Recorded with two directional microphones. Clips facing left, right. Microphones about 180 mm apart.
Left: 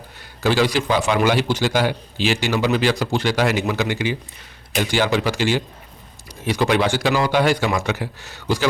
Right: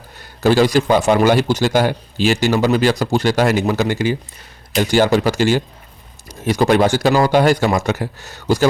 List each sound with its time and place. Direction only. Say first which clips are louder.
0.2 s a man's voice: right 5 dB; 45° right (ahead or behind)